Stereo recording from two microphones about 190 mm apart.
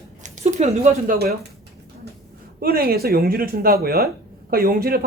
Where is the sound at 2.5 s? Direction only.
50° right (ahead or behind).